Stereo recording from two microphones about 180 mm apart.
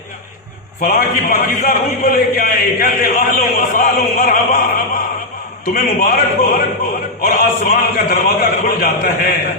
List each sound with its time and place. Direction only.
0.8 s a man's voice: 50° left (ahead or behind)
5.7 s a man's voice: 55° left (ahead or behind)